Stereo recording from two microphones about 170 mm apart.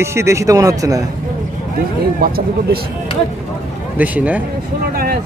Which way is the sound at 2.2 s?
60° right (ahead or behind).